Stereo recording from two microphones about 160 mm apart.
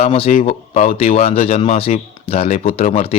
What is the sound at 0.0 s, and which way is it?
Speech, 40° left (ahead or behind).